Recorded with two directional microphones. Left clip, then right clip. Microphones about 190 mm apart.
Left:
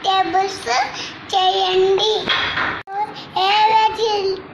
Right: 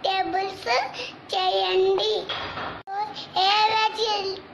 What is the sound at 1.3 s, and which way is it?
Child singing, 15° right (ahead or behind).